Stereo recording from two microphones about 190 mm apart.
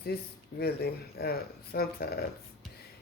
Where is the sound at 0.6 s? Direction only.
55° left (ahead or behind).